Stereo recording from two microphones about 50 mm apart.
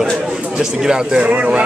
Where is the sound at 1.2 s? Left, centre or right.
Right.